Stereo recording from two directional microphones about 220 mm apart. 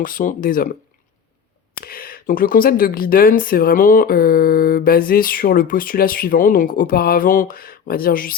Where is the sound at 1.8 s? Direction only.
40° left (ahead or behind).